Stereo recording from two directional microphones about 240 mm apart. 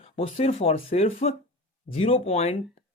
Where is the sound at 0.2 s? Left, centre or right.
Left.